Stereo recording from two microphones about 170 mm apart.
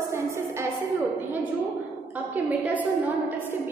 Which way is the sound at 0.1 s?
15° right (ahead or behind).